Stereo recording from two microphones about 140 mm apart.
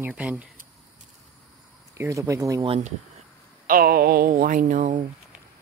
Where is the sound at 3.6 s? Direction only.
90° right; by 5.0 s 70° right (ahead or behind).